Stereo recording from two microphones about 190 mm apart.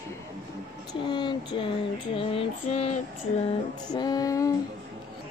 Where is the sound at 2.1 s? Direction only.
30° left (ahead or behind).